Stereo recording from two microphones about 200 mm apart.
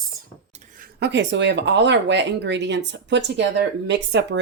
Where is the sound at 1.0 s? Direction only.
60° right (ahead or behind).